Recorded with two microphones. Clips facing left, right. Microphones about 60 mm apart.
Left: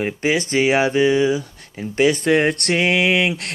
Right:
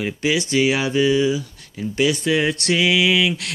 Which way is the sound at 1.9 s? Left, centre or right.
Left.